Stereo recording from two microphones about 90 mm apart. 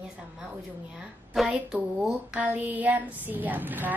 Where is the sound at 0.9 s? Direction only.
5° right (ahead or behind).